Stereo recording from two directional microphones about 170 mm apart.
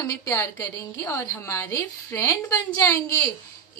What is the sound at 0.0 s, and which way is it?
A woman's voice, 20° left (ahead or behind).